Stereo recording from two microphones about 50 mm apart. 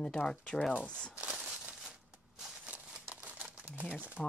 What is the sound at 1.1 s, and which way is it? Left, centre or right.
Speech, right.